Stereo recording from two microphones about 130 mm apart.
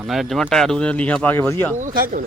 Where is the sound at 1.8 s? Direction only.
85° right.